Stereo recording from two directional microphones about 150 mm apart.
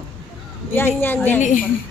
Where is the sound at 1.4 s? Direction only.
60° left (ahead or behind).